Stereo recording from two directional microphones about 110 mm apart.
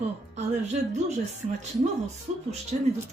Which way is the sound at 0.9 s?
90° right.